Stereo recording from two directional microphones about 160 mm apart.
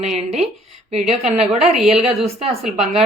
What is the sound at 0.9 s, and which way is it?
A woman's voice, 40° right (ahead or behind).